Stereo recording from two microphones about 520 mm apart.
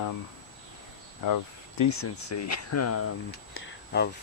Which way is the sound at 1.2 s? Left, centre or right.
Left.